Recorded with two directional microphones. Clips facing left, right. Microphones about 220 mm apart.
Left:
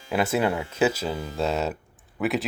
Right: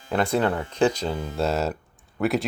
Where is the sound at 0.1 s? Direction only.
5° left (ahead or behind).